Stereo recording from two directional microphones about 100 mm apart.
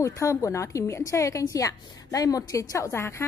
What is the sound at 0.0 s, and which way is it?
A woman's voice, 35° left (ahead or behind).